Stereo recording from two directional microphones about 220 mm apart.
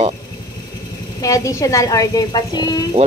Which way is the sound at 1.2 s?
15° left (ahead or behind).